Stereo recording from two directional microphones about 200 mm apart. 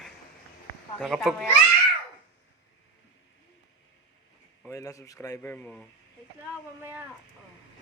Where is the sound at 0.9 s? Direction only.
Centre (ahead or behind).